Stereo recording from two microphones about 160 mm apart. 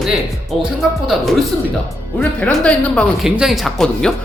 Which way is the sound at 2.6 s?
5° left (ahead or behind).